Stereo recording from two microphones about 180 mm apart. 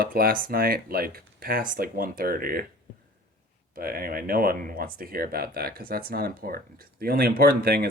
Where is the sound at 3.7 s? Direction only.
55° right (ahead or behind).